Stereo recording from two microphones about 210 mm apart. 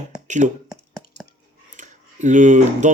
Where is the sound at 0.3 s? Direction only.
35° right (ahead or behind).